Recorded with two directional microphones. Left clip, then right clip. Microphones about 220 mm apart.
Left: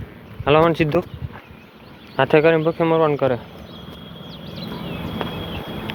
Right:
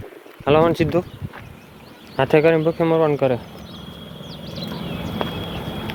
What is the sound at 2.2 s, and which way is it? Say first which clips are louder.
Speech: left 1 dB; 5° right (ahead or behind).